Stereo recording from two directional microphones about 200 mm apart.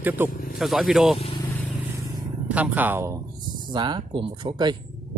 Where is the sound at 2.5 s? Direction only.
10° right (ahead or behind).